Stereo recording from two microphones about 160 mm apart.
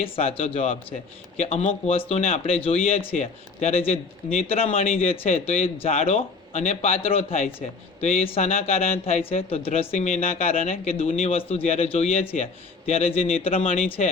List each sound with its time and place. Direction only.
0.0 s speech: 35° left (ahead or behind)
10.5 s speech: 60° left (ahead or behind)
10.8 s speech: 40° left (ahead or behind)